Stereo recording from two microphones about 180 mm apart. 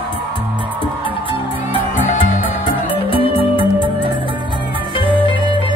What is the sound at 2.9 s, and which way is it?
Music, 30° left (ahead or behind).